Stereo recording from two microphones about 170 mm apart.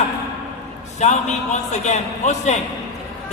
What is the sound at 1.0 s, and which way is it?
A man's voice, 40° left (ahead or behind).